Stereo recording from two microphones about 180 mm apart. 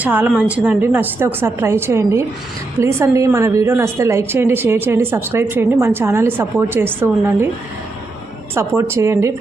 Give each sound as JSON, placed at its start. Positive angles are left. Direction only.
{"t": 0.0, "sound": "a woman's voice", "side_deg": -10}
{"t": 8.5, "sound": "a woman's voice", "side_deg": -15}